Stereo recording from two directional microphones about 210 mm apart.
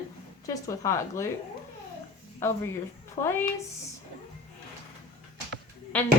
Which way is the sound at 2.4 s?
10° left (ahead or behind).